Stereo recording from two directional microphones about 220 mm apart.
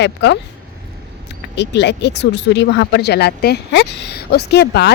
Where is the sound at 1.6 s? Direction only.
50° left (ahead or behind).